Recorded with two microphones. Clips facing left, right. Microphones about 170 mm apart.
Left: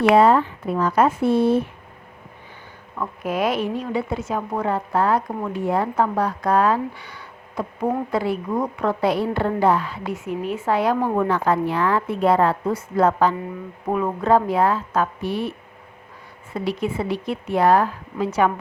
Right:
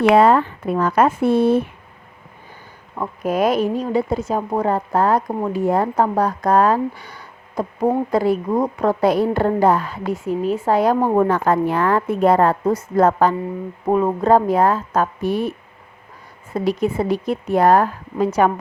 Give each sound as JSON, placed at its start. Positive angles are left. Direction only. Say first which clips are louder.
{"t": 0.1, "sound": "speech", "louder": "right 1 dB", "side_deg": -60}
{"t": 2.9, "sound": "a woman's voice", "louder": "right 4 dB", "side_deg": -40}
{"t": 13.8, "sound": "a woman's voice", "louder": "right 4 dB", "side_deg": -35}